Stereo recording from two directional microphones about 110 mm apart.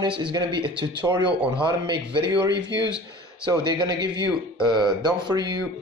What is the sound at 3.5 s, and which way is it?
A man's voice, 40° right (ahead or behind).